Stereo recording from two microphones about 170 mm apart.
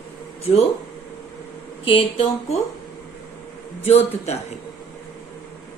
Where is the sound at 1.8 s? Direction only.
35° left (ahead or behind).